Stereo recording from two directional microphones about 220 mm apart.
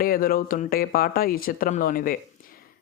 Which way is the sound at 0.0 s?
40° left (ahead or behind).